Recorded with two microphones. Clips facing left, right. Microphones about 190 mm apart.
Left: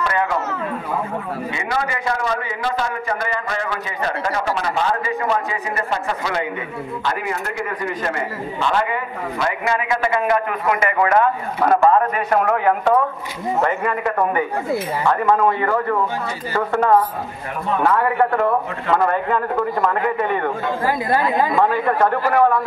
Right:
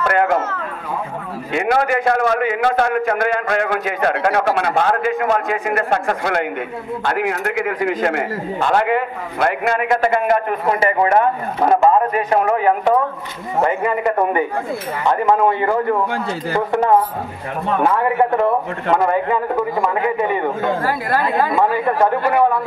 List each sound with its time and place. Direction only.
0.0 s a sound: 60° right (ahead or behind)
1.5 s a man's voice: 65° right (ahead or behind)
7.1 s a man's voice: 65° right (ahead or behind)
8.5 s a man's voice: 45° right (ahead or behind)
8.8 s a man's voice: 70° right (ahead or behind); by 12.4 s 25° right (ahead or behind)
13.6 s a man's voice: 10° right (ahead or behind)
15.0 s a man's voice: 20° right (ahead or behind)
20.8 s speech: 15° left (ahead or behind)
21.5 s a man's voice: 10° right (ahead or behind)